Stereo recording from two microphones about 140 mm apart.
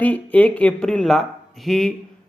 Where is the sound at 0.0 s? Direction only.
10° left (ahead or behind).